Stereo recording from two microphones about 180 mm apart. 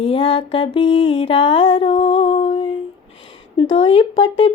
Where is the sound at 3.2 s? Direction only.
30° left (ahead or behind).